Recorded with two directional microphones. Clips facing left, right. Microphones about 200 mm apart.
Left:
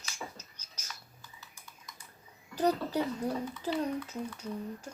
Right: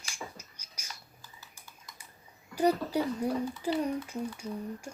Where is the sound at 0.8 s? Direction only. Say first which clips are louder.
Even; 30° right (ahead or behind).